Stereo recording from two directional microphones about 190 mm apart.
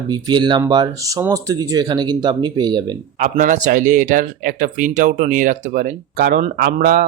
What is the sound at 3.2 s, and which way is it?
Speech, 40° right (ahead or behind).